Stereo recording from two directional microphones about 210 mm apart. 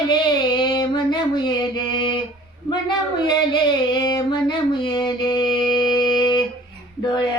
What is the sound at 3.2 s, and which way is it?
Music, 20° left (ahead or behind).